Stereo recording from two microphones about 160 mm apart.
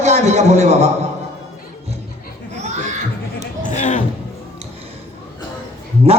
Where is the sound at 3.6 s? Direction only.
50° left (ahead or behind).